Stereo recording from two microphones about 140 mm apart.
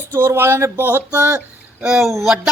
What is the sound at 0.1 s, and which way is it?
A man's voice, 15° right (ahead or behind).